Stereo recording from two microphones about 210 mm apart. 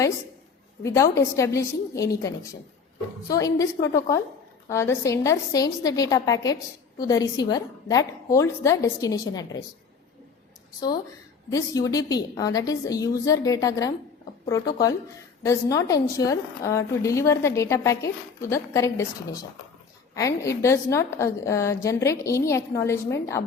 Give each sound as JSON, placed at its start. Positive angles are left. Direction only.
{"t": 0.8, "sound": "a woman's voice", "side_deg": 15}
{"t": 3.2, "sound": "a woman's voice", "side_deg": 15}
{"t": 10.8, "sound": "a woman's voice", "side_deg": 20}